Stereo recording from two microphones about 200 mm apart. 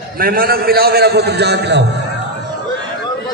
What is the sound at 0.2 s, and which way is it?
A man's voice, 50° right (ahead or behind).